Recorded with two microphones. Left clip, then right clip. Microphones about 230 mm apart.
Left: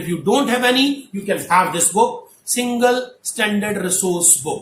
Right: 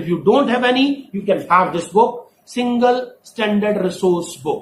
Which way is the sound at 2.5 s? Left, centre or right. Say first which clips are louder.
Right 1 dB; left.